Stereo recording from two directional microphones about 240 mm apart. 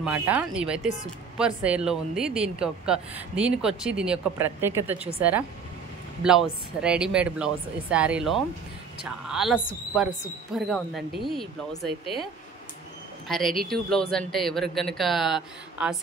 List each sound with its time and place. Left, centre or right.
0.0 s speech: centre
6.2 s speech: centre
13.3 s speech: centre